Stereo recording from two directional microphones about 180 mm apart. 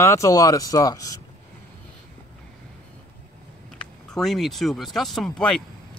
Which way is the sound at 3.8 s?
5° left (ahead or behind).